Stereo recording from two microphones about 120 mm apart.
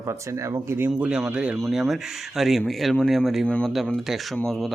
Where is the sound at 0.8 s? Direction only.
10° right (ahead or behind).